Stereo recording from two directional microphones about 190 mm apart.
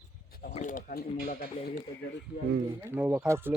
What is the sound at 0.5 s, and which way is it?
Speech, 40° left (ahead or behind).